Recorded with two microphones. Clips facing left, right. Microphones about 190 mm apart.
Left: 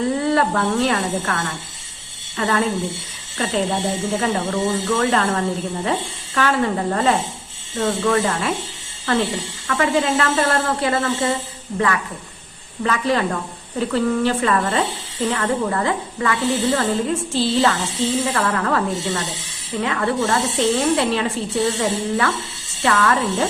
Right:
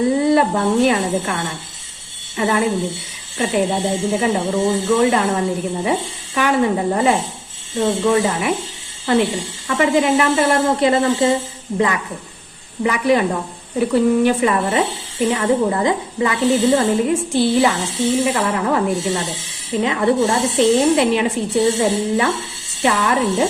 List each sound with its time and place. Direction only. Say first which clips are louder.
0.0 s speech: right 4 dB; 15° right (ahead or behind)
12.8 s speech: right 4 dB; 15° right (ahead or behind)